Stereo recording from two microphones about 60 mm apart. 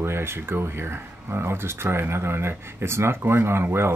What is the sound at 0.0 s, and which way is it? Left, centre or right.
Speech, right.